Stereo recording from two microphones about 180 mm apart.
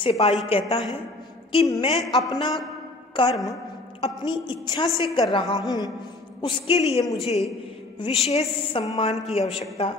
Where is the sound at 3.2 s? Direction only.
25° left (ahead or behind).